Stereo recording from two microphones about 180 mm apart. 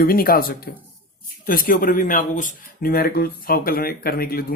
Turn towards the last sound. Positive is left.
turn(degrees=60)  # may be behind; listen again after turning